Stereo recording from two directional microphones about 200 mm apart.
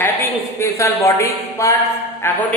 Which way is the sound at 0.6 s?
15° left (ahead or behind).